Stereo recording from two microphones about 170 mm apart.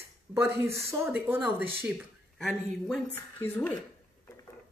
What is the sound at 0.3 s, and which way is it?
Speech, 15° right (ahead or behind).